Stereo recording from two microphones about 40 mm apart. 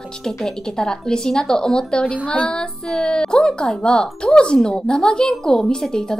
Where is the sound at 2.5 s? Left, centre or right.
Centre.